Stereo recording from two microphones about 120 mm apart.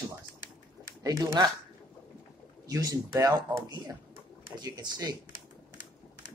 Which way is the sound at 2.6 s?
30° right (ahead or behind).